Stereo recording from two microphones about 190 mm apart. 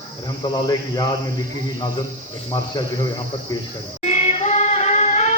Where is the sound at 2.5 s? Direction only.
25° left (ahead or behind).